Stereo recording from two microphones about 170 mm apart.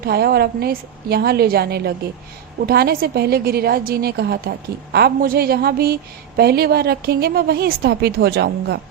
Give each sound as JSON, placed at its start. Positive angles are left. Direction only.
{"t": 0.0, "sound": "a woman's voice", "side_deg": -65}